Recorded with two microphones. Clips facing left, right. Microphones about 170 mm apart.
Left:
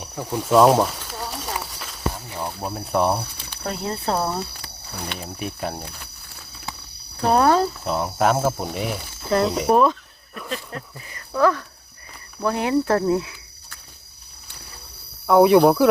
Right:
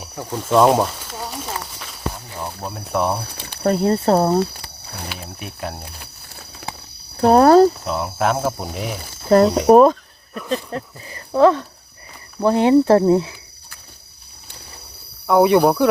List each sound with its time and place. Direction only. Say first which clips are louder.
0.0 s a sound: even; centre (ahead or behind)
0.4 s speech: right 1 dB; centre (ahead or behind)
1.0 s a sound: right 2 dB; centre (ahead or behind)
1.5 s clip-clop: even; centre (ahead or behind)
2.3 s speech: left 1 dB; 10° left (ahead or behind)
3.6 s speech: right 11 dB; 45° right (ahead or behind)
5.0 s speech: left 3 dB; 5° right (ahead or behind)
7.2 s speech: right 7 dB; 40° right (ahead or behind)
7.9 s speech: even; centre (ahead or behind)
9.3 s speech: right 7 dB; 45° right (ahead or behind); by 13.3 s 30° right (ahead or behind)
15.3 s speech: even; centre (ahead or behind)